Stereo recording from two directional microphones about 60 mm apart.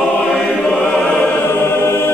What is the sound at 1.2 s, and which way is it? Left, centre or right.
Choir, left.